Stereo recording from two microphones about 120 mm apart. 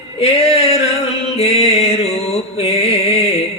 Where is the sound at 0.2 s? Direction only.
60° left (ahead or behind).